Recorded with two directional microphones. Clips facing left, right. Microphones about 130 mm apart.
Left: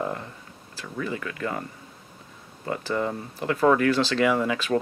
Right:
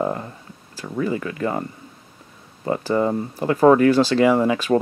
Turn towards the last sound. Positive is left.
turn(degrees=-35)  # may be behind; listen again after turning